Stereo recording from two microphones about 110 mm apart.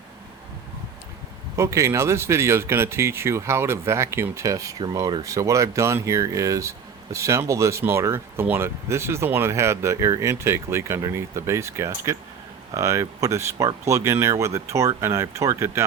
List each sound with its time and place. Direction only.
1.5 s speech: 25° right (ahead or behind)